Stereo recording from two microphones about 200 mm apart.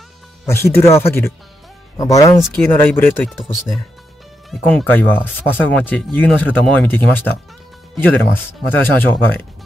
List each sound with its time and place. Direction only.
0.5 s speech: 15° left (ahead or behind)
3.3 s speech: centre (ahead or behind)